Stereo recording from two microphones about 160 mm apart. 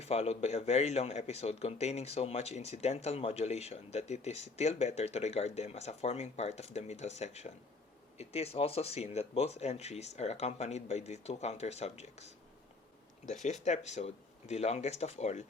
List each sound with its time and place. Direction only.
0.0 s speech: 40° left (ahead or behind)
13.4 s speech: 45° left (ahead or behind)